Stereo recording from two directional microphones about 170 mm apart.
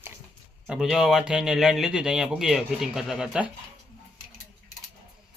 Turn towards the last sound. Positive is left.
turn(degrees=-5)  # may be behind; listen again after turning